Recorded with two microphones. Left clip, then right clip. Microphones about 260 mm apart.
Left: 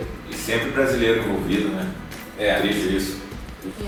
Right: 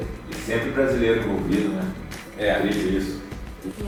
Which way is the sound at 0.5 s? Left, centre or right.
Centre.